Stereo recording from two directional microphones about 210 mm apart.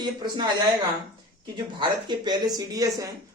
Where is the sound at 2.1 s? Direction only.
20° right (ahead or behind).